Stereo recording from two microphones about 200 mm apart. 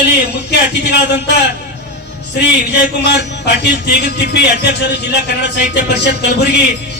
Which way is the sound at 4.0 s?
55° left (ahead or behind).